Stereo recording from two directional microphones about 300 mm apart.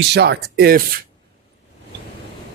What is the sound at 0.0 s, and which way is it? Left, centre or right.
Speech, right.